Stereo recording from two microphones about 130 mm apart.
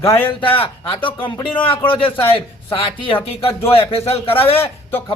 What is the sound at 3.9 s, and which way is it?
Music, 45° left (ahead or behind).